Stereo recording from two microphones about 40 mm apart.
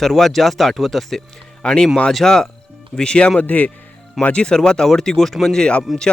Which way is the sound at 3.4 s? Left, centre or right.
Left.